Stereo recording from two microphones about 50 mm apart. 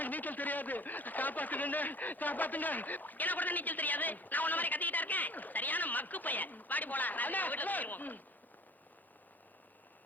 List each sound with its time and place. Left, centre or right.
0.0 s speech: left